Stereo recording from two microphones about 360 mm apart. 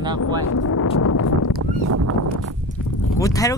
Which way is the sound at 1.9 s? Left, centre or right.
Right.